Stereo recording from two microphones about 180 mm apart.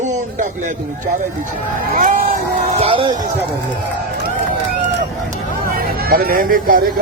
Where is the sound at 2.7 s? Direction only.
30° right (ahead or behind).